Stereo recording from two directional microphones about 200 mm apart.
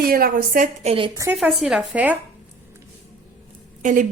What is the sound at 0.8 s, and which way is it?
Speech, 30° right (ahead or behind).